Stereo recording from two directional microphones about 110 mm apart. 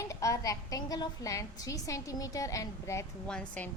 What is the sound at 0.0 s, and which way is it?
A woman's voice, 30° left (ahead or behind).